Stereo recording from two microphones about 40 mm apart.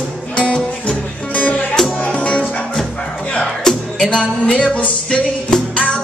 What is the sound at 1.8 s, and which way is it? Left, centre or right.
Music, centre.